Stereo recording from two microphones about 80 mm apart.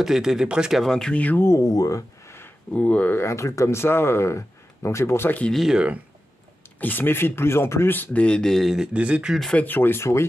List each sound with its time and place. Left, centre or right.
0.0 s speech: centre
0.8 s speech: centre
1.2 s speech: left
1.5 s speech: left
2.2 s a sound: left
2.7 s speech: centre
3.2 s speech: left
5.5 s speech: centre
6.8 s speech: left; by 9.3 s centre
9.5 s speech: left